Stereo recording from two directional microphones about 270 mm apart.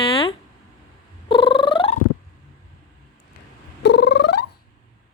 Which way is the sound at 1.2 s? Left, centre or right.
Centre.